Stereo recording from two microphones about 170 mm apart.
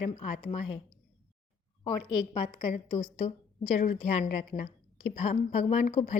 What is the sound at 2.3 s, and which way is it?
Speech, 30° left (ahead or behind).